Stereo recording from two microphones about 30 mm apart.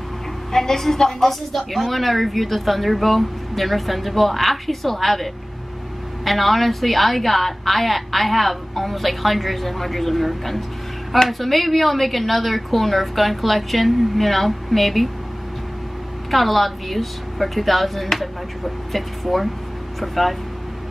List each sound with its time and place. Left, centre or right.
0.5 s a woman's voice: centre
1.2 s a woman's voice: centre
16.3 s a woman's voice: centre